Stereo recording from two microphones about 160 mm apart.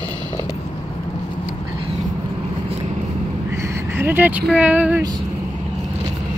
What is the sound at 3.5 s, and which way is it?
Vehicle, 20° right (ahead or behind).